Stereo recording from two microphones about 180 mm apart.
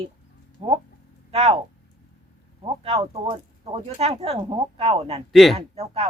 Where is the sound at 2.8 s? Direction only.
35° right (ahead or behind).